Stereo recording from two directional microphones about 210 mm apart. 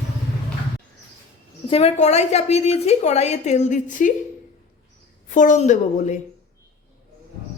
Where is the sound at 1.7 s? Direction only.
30° left (ahead or behind).